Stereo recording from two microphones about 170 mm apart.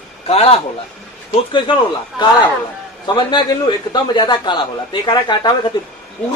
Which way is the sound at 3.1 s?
25° left (ahead or behind).